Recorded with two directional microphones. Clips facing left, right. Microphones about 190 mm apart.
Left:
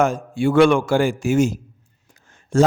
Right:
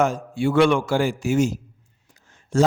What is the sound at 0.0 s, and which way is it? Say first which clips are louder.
A man's voice: left 2 dB; 50° left (ahead or behind).